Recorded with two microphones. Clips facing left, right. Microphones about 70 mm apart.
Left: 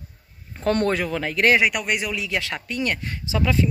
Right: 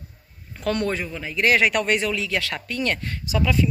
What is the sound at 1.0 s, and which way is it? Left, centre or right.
Speech, left.